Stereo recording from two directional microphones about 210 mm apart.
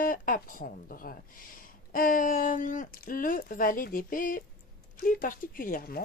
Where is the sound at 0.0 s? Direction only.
40° left (ahead or behind).